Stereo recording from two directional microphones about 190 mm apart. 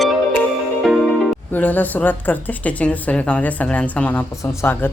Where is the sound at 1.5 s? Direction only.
10° left (ahead or behind).